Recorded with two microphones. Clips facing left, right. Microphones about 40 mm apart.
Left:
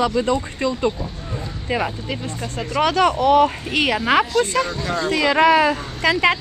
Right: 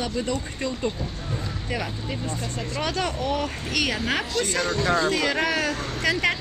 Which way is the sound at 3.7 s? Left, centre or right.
Left.